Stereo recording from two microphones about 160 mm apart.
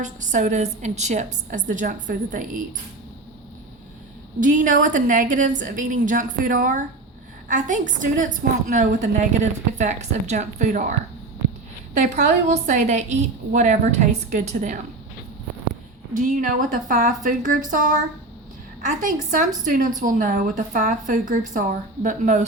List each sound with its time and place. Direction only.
0.0 s a woman's voice: 50° right (ahead or behind)
4.4 s a woman's voice: 55° right (ahead or behind)
11.9 s a woman's voice: 45° right (ahead or behind)
16.1 s a woman's voice: 55° right (ahead or behind)
19.0 s a woman's voice: 55° right (ahead or behind)